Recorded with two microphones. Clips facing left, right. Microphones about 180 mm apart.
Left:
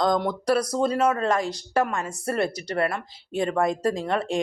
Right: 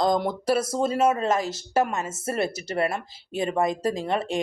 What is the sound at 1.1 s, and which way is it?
Speech, 25° right (ahead or behind).